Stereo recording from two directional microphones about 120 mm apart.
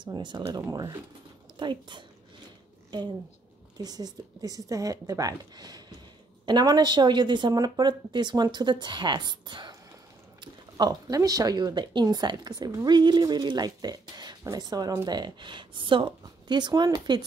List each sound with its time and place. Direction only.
0.0 s speech: 40° right (ahead or behind)
0.5 s speech: 25° right (ahead or behind)
1.6 s speech: 40° right (ahead or behind)
3.7 s speech: 35° right (ahead or behind)